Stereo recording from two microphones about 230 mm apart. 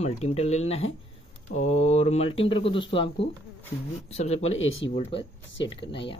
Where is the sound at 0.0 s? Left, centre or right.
Left.